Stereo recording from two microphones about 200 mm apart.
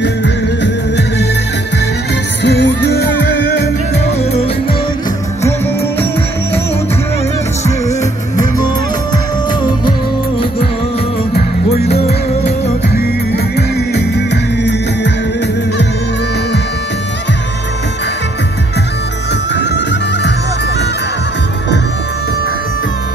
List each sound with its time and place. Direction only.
0.0 s music: 60° left (ahead or behind)
2.4 s music: 60° left (ahead or behind)
3.9 s music: 35° left (ahead or behind)
9.1 s music: 25° left (ahead or behind)
11.3 s music: 55° left (ahead or behind)
13.6 s music: 55° left (ahead or behind)
19.5 s music: 60° left (ahead or behind)